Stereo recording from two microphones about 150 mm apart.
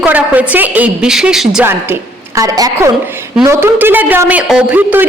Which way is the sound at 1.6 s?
20° right (ahead or behind).